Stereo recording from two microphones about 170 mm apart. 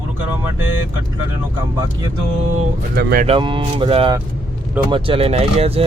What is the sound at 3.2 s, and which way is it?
Speech, 30° right (ahead or behind).